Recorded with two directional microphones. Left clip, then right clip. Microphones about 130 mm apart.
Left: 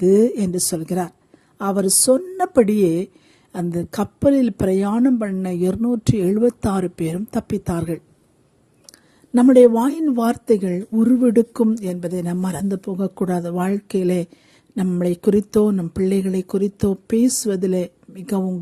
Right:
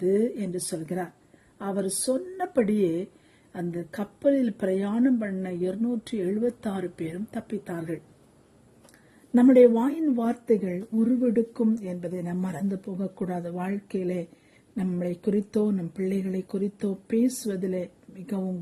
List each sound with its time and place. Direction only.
0.0 s speech: 40° left (ahead or behind)
9.3 s speech: 30° left (ahead or behind)
11.0 s speech: 55° left (ahead or behind)